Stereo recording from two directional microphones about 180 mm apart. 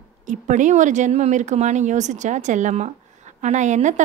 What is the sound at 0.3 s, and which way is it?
A woman's voice, 45° right (ahead or behind).